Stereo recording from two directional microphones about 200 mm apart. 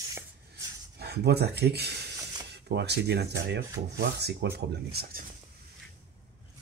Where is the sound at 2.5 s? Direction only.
55° right (ahead or behind).